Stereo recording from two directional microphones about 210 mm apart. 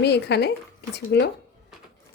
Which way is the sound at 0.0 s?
50° left (ahead or behind).